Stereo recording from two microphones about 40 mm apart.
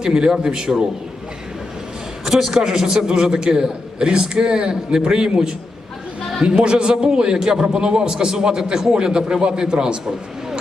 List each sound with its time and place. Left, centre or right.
0.0 s a man's voice: centre
2.2 s a man's voice: centre